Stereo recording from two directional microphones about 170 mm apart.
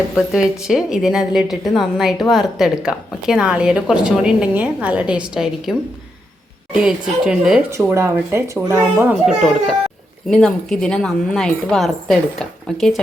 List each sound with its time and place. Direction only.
0.6 s a woman's voice: 5° right (ahead or behind)
6.8 s a woman's voice: 5° right (ahead or behind)
7.9 s a child's voice: 15° right (ahead or behind)
9.2 s a woman's voice: centre (ahead or behind)